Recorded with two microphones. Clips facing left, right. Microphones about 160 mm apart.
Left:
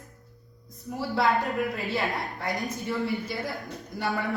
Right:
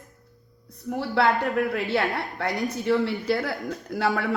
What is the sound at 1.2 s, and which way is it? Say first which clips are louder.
A woman's voice: right 3 dB; 70° right (ahead or behind).